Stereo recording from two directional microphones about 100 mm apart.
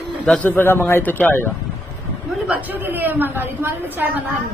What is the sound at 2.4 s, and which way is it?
A woman's voice, 15° right (ahead or behind).